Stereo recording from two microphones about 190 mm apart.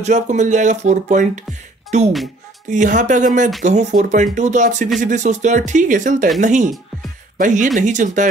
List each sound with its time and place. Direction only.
0.0 s speech: 40° right (ahead or behind)